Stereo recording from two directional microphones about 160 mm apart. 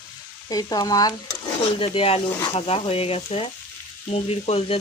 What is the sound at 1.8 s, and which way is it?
Stir, 35° left (ahead or behind).